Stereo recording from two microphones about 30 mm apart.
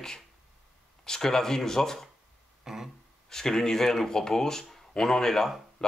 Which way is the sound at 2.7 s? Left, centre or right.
Centre.